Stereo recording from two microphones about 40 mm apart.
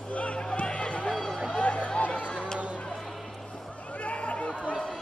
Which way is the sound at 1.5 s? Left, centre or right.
Left.